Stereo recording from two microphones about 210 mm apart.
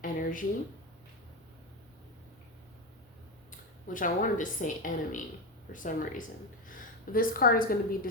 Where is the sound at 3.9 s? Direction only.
40° left (ahead or behind).